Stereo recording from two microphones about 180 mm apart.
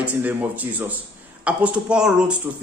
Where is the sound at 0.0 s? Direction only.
10° right (ahead or behind).